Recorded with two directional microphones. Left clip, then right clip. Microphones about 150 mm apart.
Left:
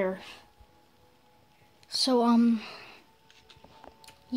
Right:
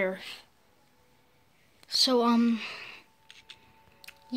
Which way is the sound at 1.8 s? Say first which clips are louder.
Right 1 dB; 10° left (ahead or behind).